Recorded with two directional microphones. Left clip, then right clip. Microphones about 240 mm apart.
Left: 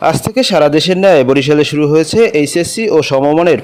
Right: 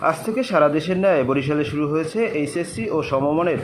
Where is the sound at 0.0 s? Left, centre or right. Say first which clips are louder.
Left 9 dB; left.